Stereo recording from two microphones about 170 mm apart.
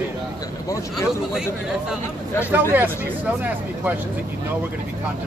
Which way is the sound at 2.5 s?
10° right (ahead or behind).